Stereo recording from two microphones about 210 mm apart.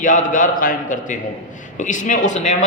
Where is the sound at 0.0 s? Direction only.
40° left (ahead or behind).